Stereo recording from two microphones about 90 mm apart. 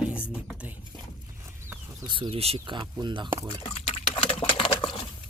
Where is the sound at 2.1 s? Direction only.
75° right (ahead or behind); by 3.3 s 60° right (ahead or behind).